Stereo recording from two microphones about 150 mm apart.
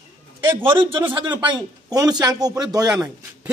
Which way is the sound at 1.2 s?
30° right (ahead or behind).